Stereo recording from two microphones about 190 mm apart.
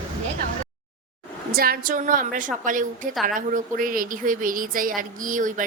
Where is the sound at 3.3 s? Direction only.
45° right (ahead or behind).